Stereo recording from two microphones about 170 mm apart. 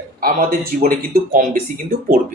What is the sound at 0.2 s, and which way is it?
Speech, 60° right (ahead or behind).